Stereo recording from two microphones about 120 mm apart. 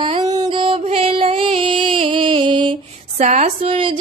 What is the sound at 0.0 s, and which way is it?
Music, 40° right (ahead or behind).